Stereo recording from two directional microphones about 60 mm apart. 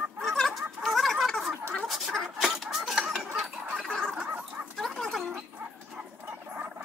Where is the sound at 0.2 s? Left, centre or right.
Centre.